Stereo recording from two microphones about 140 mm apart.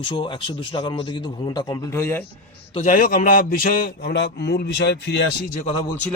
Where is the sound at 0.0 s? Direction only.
35° left (ahead or behind).